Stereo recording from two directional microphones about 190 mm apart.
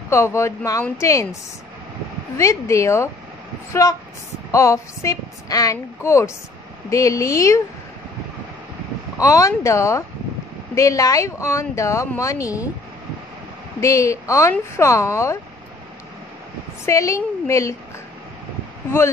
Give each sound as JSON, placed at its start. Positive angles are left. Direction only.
{"t": 0.1, "sound": "speech", "side_deg": 15}
{"t": 2.3, "sound": "speech", "side_deg": 15}
{"t": 9.2, "sound": "speech", "side_deg": 15}
{"t": 13.7, "sound": "speech", "side_deg": 15}
{"t": 16.8, "sound": "speech", "side_deg": 15}